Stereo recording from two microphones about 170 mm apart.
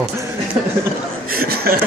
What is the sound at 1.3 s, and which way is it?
Speech, 65° right (ahead or behind).